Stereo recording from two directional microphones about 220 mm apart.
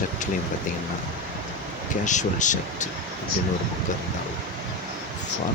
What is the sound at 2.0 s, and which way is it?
Speech, 35° left (ahead or behind).